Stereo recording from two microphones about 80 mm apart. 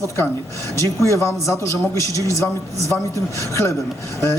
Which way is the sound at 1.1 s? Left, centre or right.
Left.